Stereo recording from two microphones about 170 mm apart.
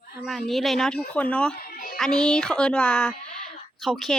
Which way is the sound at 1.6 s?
55° left (ahead or behind).